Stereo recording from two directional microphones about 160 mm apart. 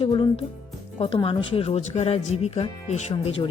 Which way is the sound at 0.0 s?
35° left (ahead or behind).